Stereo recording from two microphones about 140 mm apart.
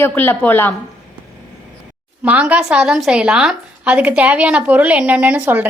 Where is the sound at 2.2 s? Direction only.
10° right (ahead or behind).